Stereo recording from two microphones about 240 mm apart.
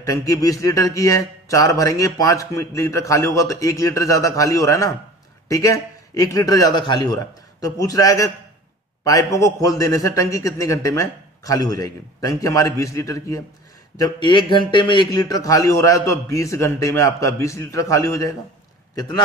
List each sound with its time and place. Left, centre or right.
0.0 s a man's voice: centre